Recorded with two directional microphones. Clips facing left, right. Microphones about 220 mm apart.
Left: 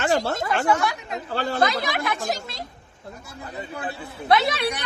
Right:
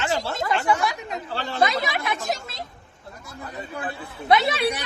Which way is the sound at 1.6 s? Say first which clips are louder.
Right 3 dB; centre (ahead or behind).